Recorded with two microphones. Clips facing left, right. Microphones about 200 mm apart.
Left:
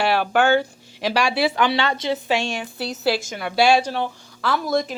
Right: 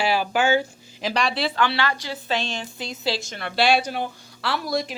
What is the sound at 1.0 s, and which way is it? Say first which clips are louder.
A woman's voice: left 4 dB; 5° left (ahead or behind).